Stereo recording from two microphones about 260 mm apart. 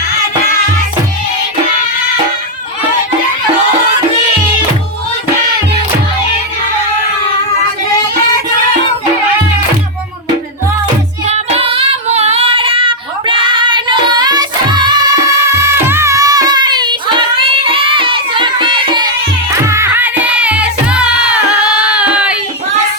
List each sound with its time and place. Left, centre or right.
11.3 s child singing: right
19.6 s music: centre